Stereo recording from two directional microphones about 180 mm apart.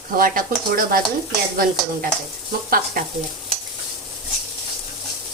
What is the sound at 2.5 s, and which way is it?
Speech, 55° right (ahead or behind).